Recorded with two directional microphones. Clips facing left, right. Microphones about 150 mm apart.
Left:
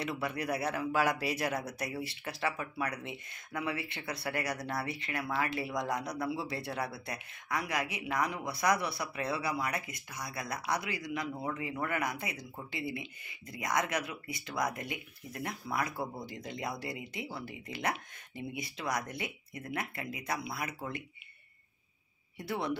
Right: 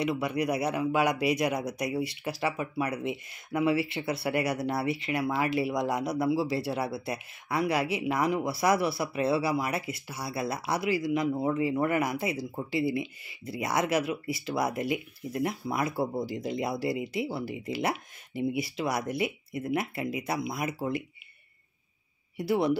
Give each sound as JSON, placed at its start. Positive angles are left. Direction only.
{"t": 0.0, "sound": "speech", "side_deg": -20}